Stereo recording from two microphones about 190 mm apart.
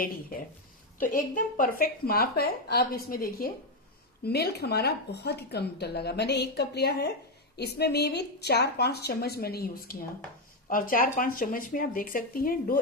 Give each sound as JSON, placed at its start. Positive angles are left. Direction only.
{"t": 0.0, "sound": "a woman's voice", "side_deg": 50}